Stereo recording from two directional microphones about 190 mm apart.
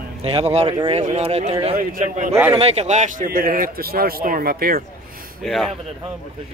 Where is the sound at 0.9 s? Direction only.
35° right (ahead or behind).